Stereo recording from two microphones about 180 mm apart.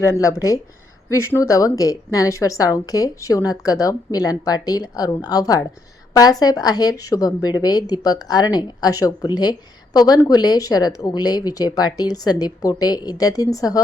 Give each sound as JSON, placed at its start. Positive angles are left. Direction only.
{"t": 0.0, "sound": "a woman's voice", "side_deg": 15}